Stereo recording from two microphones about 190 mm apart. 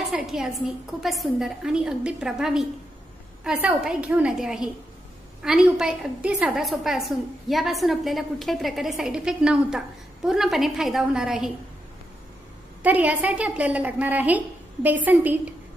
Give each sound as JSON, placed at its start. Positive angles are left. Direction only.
{"t": 0.1, "sound": "a woman's voice", "side_deg": 0}
{"t": 12.8, "sound": "a woman's voice", "side_deg": -10}